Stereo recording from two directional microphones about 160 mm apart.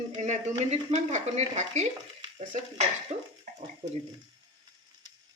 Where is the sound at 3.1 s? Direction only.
40° right (ahead or behind).